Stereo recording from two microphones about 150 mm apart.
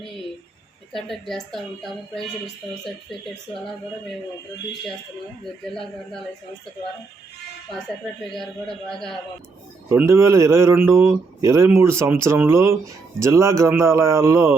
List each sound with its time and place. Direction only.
0.9 s speech: centre (ahead or behind)
5.7 s speech: centre (ahead or behind)
8.3 s speech: centre (ahead or behind)
9.9 s speech: 15° right (ahead or behind)